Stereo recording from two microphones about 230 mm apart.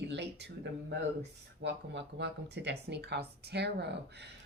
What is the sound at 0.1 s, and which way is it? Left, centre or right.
Speech, right.